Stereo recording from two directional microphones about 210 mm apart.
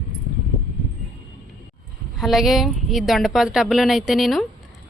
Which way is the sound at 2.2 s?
Centre (ahead or behind).